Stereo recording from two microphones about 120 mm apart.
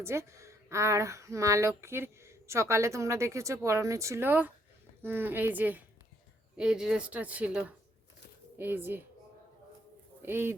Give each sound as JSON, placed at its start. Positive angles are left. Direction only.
{"t": 0.0, "sound": "speech", "side_deg": -25}
{"t": 10.2, "sound": "speech", "side_deg": -20}